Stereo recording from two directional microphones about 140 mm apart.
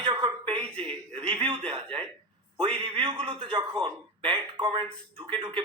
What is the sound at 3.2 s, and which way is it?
Speech, 35° right (ahead or behind).